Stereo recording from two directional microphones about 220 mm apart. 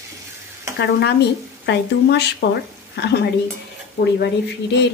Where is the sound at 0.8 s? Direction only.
50° left (ahead or behind).